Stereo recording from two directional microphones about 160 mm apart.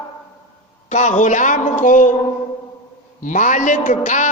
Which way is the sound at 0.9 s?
50° left (ahead or behind).